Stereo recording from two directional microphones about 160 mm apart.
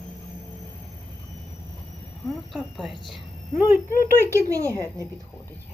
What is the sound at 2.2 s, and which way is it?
Speech, centre (ahead or behind).